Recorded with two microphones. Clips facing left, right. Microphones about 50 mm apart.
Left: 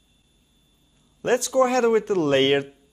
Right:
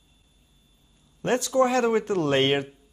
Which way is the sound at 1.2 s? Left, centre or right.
Left.